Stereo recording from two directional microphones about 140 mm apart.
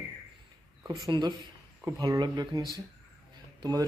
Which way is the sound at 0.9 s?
30° right (ahead or behind).